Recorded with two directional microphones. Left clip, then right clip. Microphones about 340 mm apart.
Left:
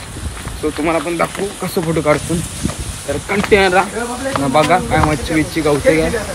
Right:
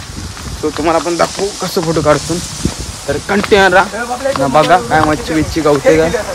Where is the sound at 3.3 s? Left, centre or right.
Centre.